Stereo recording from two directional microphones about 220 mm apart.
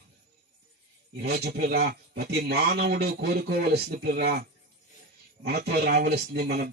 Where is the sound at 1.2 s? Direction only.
45° right (ahead or behind).